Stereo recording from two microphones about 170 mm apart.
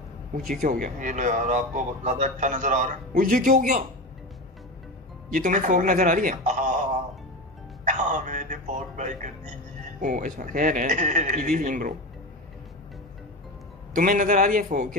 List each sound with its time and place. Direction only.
0.5 s a man's voice: 50° right (ahead or behind)
5.3 s a man's voice: 50° right (ahead or behind)
13.9 s a man's voice: 55° right (ahead or behind)